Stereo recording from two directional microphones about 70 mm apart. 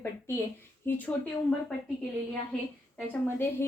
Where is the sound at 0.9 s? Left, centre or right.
Left.